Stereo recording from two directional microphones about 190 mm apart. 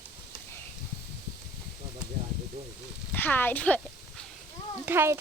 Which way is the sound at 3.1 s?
10° left (ahead or behind).